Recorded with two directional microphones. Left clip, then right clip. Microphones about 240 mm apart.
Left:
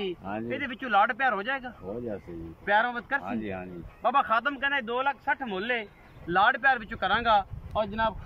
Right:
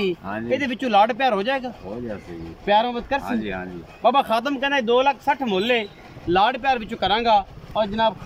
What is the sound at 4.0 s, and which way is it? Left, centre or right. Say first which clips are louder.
Speech: right 6 dB; centre.